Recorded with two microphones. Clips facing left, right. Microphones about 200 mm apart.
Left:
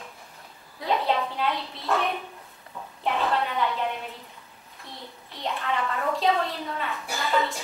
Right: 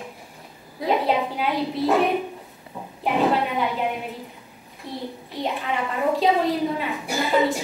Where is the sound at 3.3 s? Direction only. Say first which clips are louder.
Right 3 dB; 5° right (ahead or behind).